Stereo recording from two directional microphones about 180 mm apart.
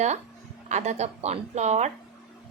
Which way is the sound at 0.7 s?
40° right (ahead or behind).